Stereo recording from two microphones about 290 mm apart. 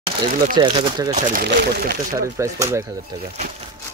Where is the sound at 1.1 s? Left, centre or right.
Right.